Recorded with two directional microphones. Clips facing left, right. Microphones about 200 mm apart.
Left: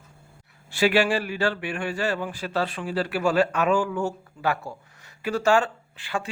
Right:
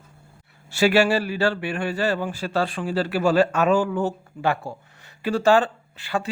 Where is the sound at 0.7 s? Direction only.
40° right (ahead or behind).